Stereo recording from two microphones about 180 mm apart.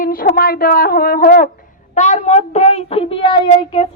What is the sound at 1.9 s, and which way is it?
Child singing, 40° left (ahead or behind).